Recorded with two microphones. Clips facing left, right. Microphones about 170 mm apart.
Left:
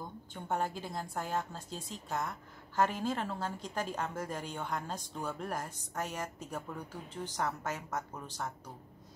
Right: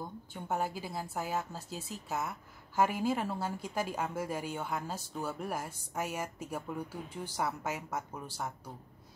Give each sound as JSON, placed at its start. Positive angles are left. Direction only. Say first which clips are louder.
{"t": 0.3, "sound": "a woman's voice", "louder": "even", "side_deg": -5}